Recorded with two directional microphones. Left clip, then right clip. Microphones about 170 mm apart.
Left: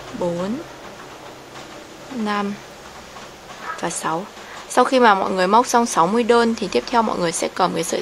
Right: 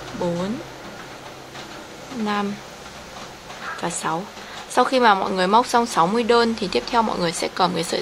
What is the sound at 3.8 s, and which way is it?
A woman's voice, 15° left (ahead or behind).